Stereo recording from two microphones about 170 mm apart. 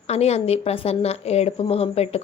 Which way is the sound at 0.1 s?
35° left (ahead or behind).